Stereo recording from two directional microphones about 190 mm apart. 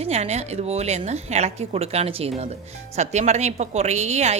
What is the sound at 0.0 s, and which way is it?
A woman's voice, 35° right (ahead or behind).